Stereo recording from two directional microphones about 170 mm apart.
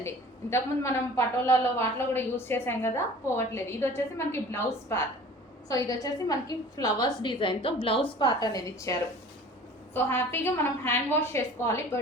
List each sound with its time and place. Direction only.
0.5 s a woman's voice: 15° left (ahead or behind)